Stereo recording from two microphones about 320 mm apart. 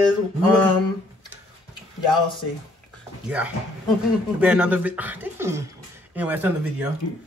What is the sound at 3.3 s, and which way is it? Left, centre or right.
Speech, centre.